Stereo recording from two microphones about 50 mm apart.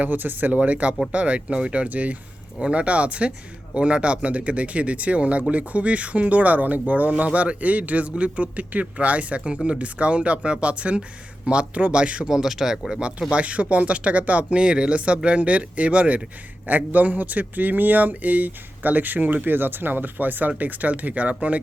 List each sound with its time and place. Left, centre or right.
0.0 s speech: right
12.3 s speech: centre; by 21.6 s right